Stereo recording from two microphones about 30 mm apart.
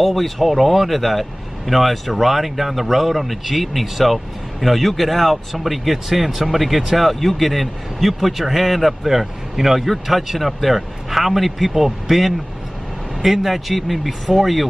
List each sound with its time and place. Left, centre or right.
0.0 s speech: centre
9.1 s speech: centre